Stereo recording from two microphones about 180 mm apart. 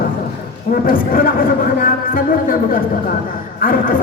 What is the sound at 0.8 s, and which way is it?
Speech, 50° left (ahead or behind).